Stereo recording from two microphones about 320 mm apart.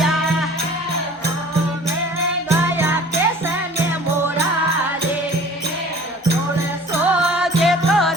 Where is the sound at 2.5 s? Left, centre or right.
Centre.